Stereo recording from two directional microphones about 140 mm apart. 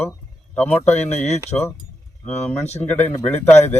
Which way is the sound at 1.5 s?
20° left (ahead or behind).